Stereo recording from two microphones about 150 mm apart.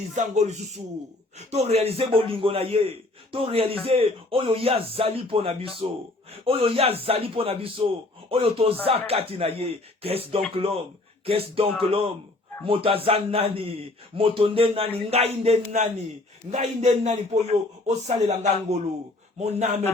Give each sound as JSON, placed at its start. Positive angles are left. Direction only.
{"t": 0.1, "sound": "a man's voice", "side_deg": -50}